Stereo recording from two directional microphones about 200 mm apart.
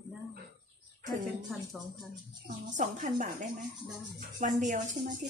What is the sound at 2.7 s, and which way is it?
Speech, 40° right (ahead or behind).